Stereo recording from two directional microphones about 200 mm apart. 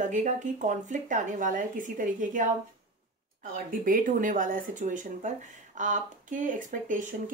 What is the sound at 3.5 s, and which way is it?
Speech, 45° right (ahead or behind).